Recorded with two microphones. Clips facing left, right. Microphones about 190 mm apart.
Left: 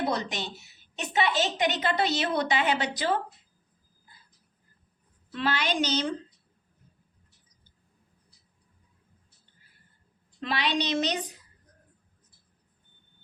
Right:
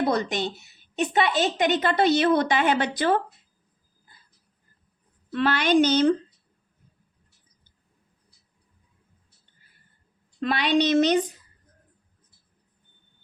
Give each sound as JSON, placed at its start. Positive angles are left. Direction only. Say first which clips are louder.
{"t": 0.1, "sound": "a woman's voice", "louder": "right 6 dB", "side_deg": -55}
{"t": 5.3, "sound": "a woman's voice", "louder": "right 8 dB", "side_deg": -55}
{"t": 10.4, "sound": "a woman's voice", "louder": "right 7 dB", "side_deg": -50}